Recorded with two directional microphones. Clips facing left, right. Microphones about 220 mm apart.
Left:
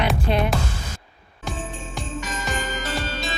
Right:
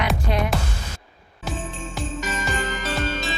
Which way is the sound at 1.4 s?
Centre (ahead or behind).